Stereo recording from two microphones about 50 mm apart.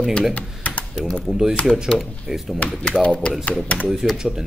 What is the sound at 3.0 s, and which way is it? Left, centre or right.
Speech, left.